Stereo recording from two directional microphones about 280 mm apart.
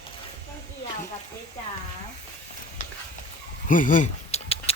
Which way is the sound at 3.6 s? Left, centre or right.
Left.